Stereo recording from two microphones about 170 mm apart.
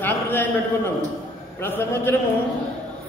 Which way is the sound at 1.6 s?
15° left (ahead or behind).